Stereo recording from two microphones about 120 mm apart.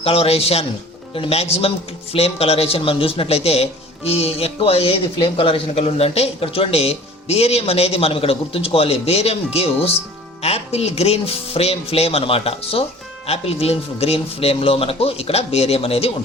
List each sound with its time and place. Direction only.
0.0 s speech: 55° left (ahead or behind)